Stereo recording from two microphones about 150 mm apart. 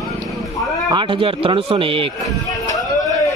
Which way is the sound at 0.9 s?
35° right (ahead or behind).